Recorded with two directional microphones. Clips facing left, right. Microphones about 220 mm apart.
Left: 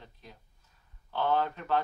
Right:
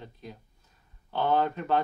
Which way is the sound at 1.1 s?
20° right (ahead or behind).